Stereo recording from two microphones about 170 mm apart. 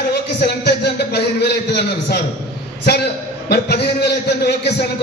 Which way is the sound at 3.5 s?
75° left (ahead or behind).